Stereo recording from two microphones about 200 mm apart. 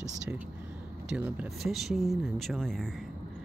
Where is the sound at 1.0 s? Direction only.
5° right (ahead or behind).